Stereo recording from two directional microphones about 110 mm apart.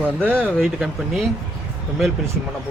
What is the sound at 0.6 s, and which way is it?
Speech, centre (ahead or behind).